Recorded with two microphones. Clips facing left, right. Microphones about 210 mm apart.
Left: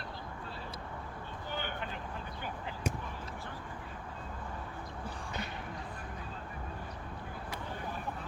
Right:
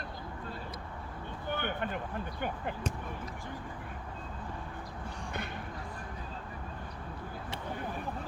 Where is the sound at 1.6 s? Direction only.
55° right (ahead or behind).